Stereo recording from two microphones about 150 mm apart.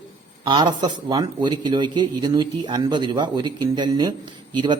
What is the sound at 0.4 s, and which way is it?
A man's voice, 30° right (ahead or behind).